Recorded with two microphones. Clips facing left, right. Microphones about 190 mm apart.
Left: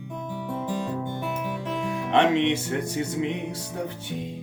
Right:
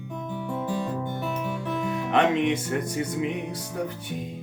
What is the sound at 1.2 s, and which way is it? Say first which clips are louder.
Music: even; 20° left (ahead or behind).